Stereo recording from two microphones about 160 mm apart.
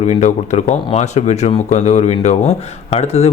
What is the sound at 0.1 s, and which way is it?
Speech, 45° left (ahead or behind).